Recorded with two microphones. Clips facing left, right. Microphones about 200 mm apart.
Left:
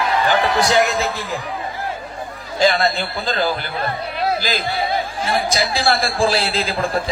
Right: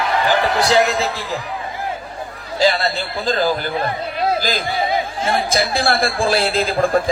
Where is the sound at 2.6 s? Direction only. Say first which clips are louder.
Even; 40° right (ahead or behind).